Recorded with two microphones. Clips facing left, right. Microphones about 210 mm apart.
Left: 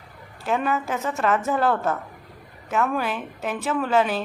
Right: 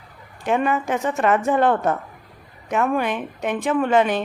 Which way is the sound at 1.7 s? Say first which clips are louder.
Right 3 dB; 15° right (ahead or behind).